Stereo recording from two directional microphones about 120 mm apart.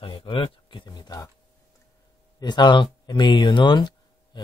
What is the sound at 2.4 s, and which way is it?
Speech, 40° left (ahead or behind).